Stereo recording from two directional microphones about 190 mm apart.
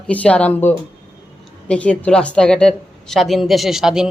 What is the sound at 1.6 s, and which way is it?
A woman's voice, 5° left (ahead or behind).